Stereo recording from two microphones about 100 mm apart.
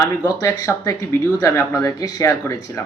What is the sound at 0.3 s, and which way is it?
Speech, 30° left (ahead or behind).